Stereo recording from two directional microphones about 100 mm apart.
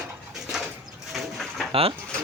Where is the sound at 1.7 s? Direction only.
70° right (ahead or behind).